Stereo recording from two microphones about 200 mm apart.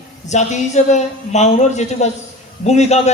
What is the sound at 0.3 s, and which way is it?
A woman's voice, 35° left (ahead or behind).